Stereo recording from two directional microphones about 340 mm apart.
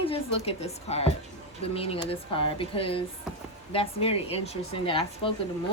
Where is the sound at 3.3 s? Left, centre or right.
Centre.